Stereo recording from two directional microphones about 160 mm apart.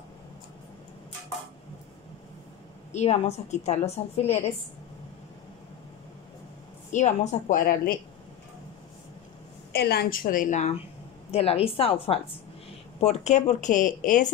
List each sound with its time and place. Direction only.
2.9 s a woman's voice: 40° left (ahead or behind)
6.9 s speech: 45° left (ahead or behind); by 8.0 s 70° left (ahead or behind)
9.7 s a woman's voice: 75° left (ahead or behind); by 14.3 s 55° left (ahead or behind)